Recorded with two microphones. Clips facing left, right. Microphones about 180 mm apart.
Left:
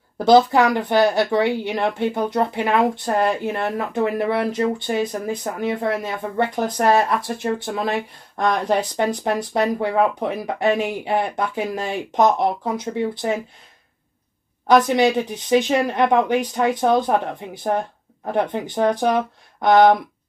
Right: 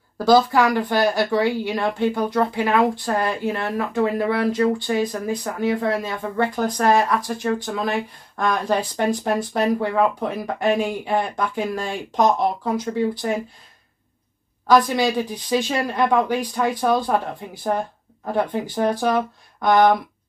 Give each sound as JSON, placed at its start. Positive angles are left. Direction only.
{"t": 0.2, "sound": "speech", "side_deg": 20}
{"t": 14.7, "sound": "speech", "side_deg": 20}